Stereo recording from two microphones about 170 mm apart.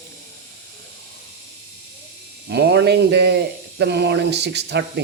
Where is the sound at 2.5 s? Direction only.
80° right.